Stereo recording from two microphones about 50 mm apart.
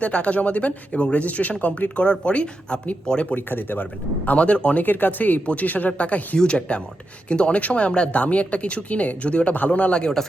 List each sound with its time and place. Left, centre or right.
0.0 s speech: left
3.3 s speech: left
4.4 s speech: left
4.8 s speech: left; by 10.2 s centre